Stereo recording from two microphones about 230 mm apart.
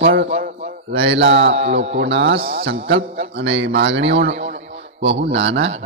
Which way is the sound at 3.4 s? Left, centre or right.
Right.